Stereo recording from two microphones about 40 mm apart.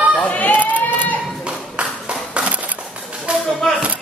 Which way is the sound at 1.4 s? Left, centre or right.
Right.